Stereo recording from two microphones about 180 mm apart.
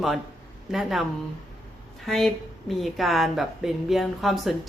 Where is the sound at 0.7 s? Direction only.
Centre (ahead or behind).